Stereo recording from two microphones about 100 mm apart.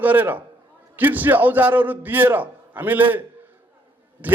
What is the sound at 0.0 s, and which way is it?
A man's voice, 20° right (ahead or behind).